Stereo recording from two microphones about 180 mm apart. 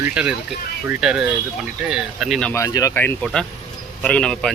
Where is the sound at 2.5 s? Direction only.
15° left (ahead or behind).